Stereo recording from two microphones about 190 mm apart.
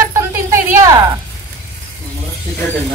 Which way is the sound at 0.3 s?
15° right (ahead or behind).